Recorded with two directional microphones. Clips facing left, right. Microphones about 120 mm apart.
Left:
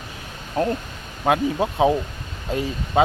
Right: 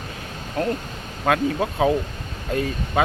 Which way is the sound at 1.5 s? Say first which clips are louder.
Left 1 dB; 20° left (ahead or behind).